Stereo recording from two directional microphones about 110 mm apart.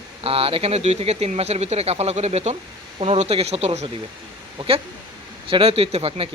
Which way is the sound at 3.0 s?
65° right (ahead or behind).